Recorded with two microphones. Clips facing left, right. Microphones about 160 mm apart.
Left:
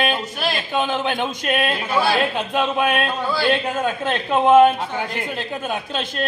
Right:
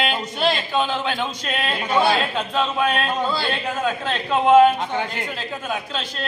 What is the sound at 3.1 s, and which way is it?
Speech, 20° right (ahead or behind).